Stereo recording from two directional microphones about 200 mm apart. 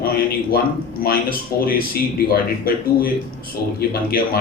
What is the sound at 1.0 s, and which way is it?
Speech, 45° left (ahead or behind).